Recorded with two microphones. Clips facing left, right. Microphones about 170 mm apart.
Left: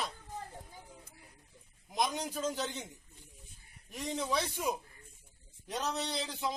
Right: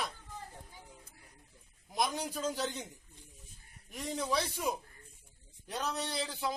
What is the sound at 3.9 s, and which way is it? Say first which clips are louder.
Speech: even; 5° left (ahead or behind).